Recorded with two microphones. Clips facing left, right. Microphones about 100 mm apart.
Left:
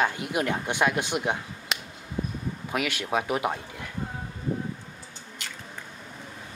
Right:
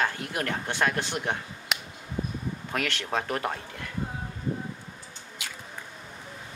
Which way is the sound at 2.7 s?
10° left (ahead or behind).